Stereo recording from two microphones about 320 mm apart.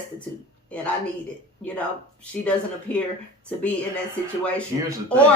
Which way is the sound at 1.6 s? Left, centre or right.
Centre.